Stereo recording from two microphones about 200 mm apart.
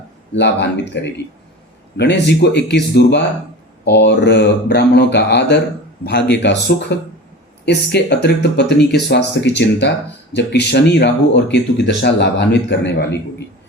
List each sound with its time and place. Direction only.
0.3 s speech: 60° left (ahead or behind)